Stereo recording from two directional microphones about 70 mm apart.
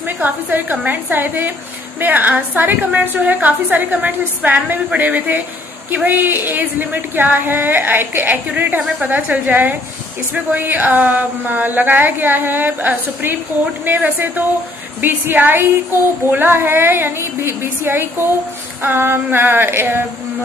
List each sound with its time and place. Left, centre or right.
0.2 s a woman's voice: right